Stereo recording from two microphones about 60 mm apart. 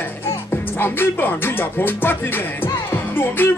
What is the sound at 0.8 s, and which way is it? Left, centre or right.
Music, left.